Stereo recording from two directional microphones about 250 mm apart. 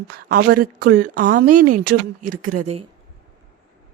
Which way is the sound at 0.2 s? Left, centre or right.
Right.